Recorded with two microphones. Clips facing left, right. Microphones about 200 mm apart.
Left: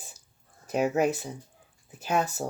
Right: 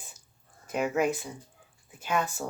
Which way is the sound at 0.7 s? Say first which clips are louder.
Left 2 dB; 40° left (ahead or behind).